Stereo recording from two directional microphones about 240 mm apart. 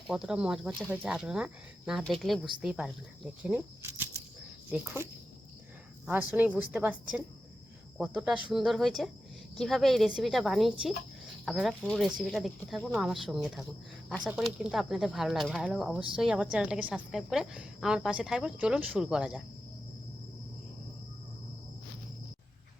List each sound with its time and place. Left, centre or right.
0.1 s a woman's voice: centre
6.1 s a woman's voice: centre